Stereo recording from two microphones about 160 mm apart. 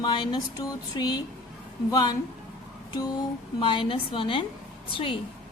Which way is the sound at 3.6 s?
30° left (ahead or behind).